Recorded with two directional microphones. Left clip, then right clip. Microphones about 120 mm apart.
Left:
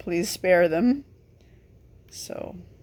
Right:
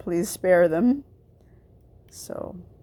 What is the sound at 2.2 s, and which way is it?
Speech, 30° right (ahead or behind).